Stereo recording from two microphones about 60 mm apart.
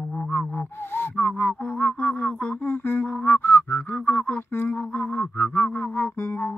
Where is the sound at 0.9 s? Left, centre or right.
Left.